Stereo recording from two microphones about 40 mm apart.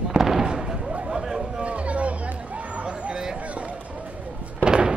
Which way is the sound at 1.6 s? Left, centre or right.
Right.